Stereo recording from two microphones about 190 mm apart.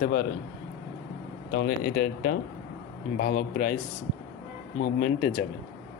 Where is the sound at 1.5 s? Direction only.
60° left (ahead or behind).